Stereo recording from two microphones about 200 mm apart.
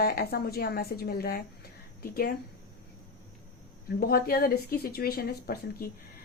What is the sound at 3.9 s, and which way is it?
A woman's voice, 50° left (ahead or behind).